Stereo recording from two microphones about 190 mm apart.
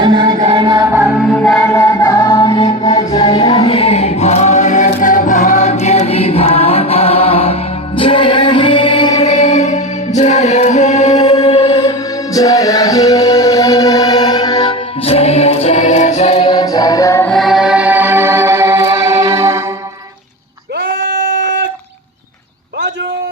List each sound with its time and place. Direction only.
0.0 s music: 25° right (ahead or behind)
1.3 s music: 5° left (ahead or behind)
1.7 s music: 15° left (ahead or behind)
3.1 s choir: 20° left (ahead or behind)
11.9 s music: 20° left (ahead or behind)
17.3 s music: centre (ahead or behind)
20.7 s sheep: 75° right (ahead or behind)